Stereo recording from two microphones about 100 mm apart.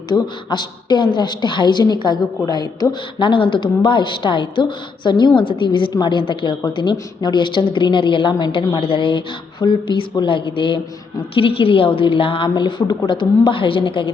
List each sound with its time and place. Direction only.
0.1 s a woman's voice: 50° left (ahead or behind)
3.2 s a woman's voice: 55° left (ahead or behind)
8.8 s speech: 60° left (ahead or behind)